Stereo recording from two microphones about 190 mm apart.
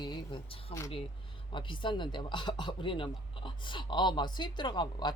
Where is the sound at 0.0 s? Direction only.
25° left (ahead or behind).